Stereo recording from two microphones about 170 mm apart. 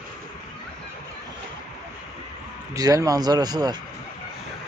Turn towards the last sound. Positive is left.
turn(degrees=-25)  # may be behind; listen again after turning